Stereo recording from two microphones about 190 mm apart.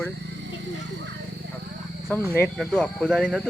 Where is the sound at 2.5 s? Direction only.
Centre (ahead or behind).